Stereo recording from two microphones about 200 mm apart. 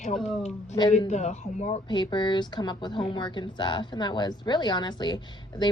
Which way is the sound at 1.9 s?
20° left (ahead or behind).